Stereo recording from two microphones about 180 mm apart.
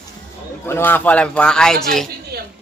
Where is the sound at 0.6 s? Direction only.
10° left (ahead or behind).